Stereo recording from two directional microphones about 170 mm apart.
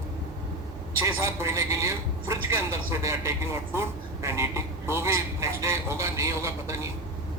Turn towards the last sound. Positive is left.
turn(degrees=-15)  # may be behind; listen again after turning